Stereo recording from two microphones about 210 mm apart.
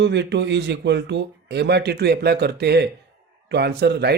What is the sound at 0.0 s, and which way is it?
Speech, 55° right (ahead or behind).